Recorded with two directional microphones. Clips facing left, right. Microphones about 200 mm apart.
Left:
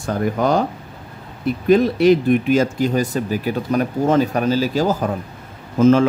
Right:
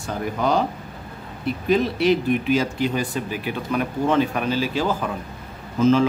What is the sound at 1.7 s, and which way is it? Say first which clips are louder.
Speech: left 6 dB; 45° left (ahead or behind).